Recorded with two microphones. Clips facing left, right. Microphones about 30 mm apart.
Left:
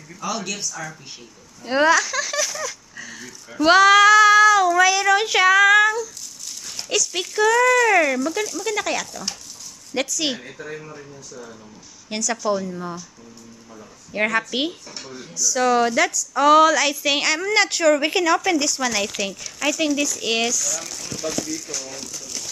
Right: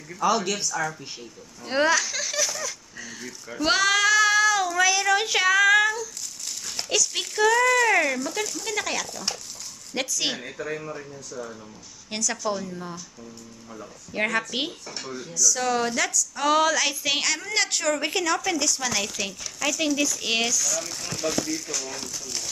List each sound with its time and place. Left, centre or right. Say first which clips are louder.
0.2 s speech: right 4 dB; right
1.7 s a woman's voice: left 5 dB; centre
10.9 s speech: right 2 dB; centre
12.1 s a woman's voice: left 5 dB; centre
14.1 s a woman's voice: left 4 dB; centre
14.9 s speech: right 1 dB; centre
15.1 s a woman's voice: left 3 dB; centre
20.5 s speech: even; centre
21.2 s speech: even; centre